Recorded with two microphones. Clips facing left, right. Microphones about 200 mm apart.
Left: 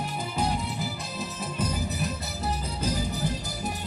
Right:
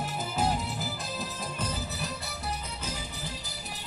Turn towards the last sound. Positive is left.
turn(degrees=45)  # may be behind; listen again after turning